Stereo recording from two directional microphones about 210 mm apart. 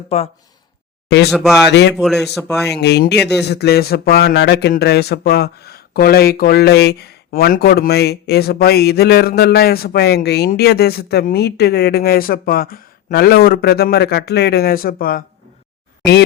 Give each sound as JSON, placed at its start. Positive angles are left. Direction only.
{"t": 1.0, "sound": "speech", "side_deg": 50}
{"t": 1.3, "sound": "speech", "side_deg": 0}
{"t": 1.7, "sound": "a man's voice", "side_deg": 55}
{"t": 2.0, "sound": "speech", "side_deg": 0}
{"t": 2.6, "sound": "speech", "side_deg": 55}